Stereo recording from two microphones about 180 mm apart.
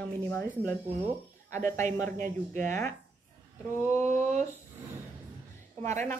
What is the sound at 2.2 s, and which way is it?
Speech, 45° right (ahead or behind).